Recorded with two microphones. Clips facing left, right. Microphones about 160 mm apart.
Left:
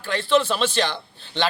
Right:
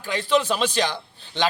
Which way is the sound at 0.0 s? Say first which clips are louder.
Left 2 dB; 15° right (ahead or behind).